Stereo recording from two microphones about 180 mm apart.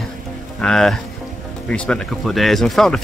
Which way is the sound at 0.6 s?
5° left (ahead or behind).